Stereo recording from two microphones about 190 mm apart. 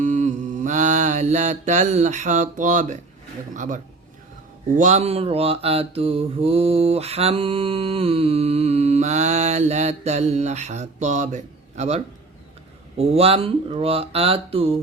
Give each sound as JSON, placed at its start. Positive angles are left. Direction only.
{"t": 0.0, "sound": "mantra", "side_deg": -40}
{"t": 4.8, "sound": "mantra", "side_deg": -40}